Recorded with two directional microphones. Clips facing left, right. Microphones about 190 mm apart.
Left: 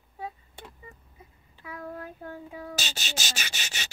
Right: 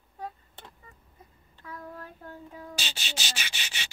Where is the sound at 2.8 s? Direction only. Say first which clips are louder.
Left 2 dB; 45° left (ahead or behind).